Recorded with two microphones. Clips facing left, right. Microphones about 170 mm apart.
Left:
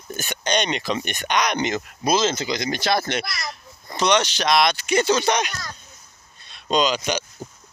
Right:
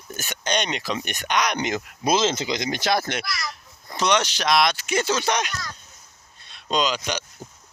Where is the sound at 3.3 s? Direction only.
50° left (ahead or behind).